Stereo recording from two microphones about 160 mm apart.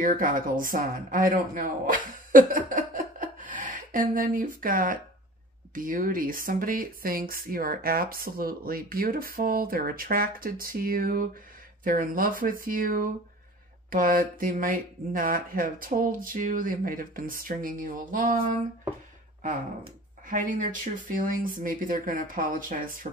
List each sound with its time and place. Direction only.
0.0 s speech: 60° right (ahead or behind)
20.2 s speech: 55° right (ahead or behind)